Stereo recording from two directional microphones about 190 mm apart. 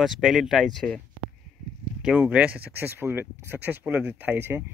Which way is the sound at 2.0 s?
5° right (ahead or behind).